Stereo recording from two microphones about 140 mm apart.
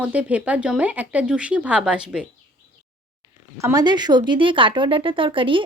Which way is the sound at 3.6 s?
25° right (ahead or behind).